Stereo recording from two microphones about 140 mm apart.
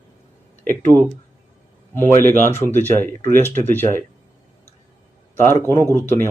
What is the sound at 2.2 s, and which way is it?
Speech, 15° left (ahead or behind).